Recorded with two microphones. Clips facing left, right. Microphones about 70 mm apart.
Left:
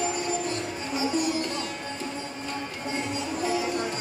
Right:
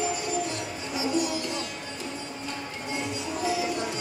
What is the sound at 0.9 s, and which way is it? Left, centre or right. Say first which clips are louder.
Music: left 1 dB; left.